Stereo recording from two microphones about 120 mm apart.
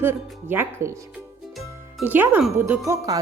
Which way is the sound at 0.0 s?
15° right (ahead or behind).